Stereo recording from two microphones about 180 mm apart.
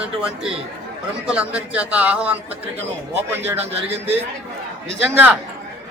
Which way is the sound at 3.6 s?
35° right (ahead or behind).